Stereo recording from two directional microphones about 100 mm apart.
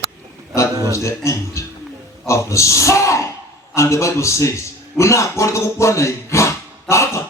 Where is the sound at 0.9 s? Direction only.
30° left (ahead or behind).